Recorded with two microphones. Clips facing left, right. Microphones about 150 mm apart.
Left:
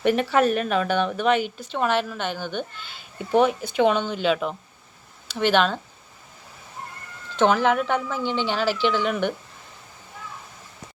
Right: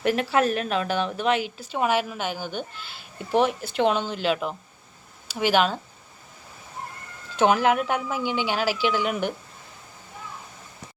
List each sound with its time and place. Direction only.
0.0 s a woman's voice: centre (ahead or behind)
7.3 s speech: 10° right (ahead or behind)